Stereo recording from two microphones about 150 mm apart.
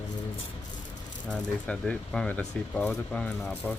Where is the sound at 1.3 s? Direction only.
5° left (ahead or behind).